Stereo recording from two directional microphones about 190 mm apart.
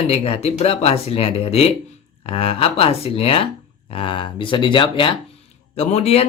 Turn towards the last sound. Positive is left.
turn(degrees=35)  # may be behind; listen again after turning